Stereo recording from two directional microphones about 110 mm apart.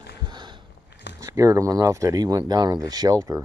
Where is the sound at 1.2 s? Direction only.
30° right (ahead or behind).